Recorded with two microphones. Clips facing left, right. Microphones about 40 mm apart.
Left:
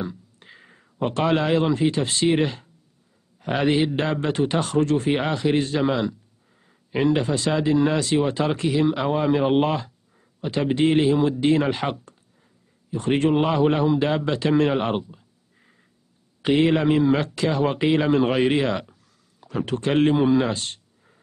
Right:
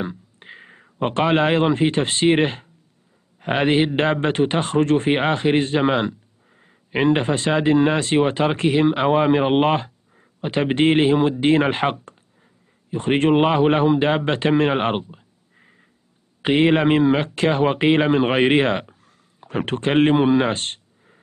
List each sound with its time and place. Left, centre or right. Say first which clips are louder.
0.0 s a man's voice: right 3 dB; right
14.5 s a sound: right 1 dB; right
16.4 s a man's voice: right 2 dB; right